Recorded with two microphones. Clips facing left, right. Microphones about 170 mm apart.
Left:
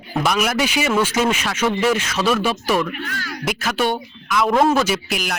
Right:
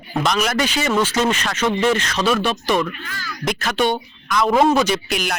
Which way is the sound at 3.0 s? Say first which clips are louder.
Left 4 dB; 65° left (ahead or behind).